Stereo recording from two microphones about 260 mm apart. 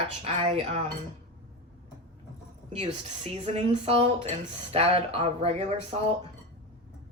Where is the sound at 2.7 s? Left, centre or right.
Right.